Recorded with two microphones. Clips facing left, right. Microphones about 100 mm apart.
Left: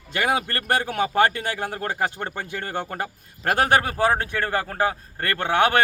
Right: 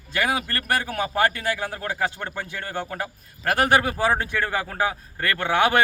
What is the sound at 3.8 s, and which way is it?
A man's voice, 45° left (ahead or behind).